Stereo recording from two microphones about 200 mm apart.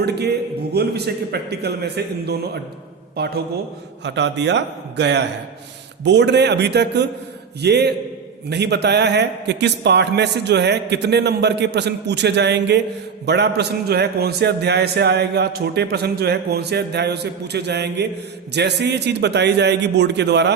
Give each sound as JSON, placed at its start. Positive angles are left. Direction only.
{"t": 0.7, "sound": "a man's voice", "side_deg": -55}